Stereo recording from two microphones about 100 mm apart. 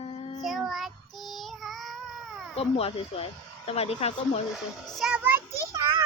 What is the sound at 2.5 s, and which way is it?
Speech, 80° left.